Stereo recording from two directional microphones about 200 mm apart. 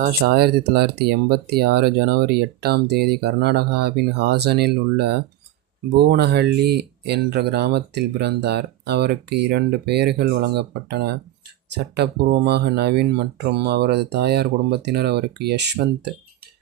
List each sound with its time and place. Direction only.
0.0 s speech: 50° right (ahead or behind)